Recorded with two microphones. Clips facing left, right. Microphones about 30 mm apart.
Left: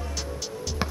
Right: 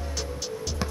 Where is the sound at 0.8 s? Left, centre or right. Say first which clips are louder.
Left 3 dB; left.